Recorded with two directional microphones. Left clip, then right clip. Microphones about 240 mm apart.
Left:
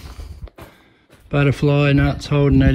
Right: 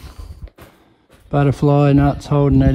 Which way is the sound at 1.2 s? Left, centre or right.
Centre.